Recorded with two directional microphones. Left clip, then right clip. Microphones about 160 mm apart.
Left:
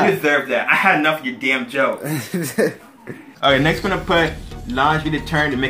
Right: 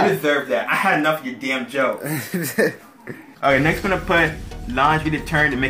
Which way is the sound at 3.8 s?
20° right (ahead or behind).